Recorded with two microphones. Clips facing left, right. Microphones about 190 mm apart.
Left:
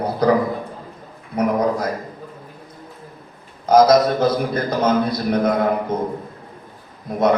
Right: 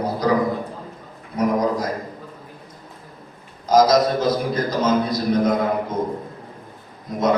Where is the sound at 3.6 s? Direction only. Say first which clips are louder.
Left 3 dB; 60° left (ahead or behind).